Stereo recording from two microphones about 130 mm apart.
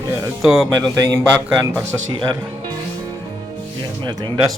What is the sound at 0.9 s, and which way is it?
Speech, 25° right (ahead or behind).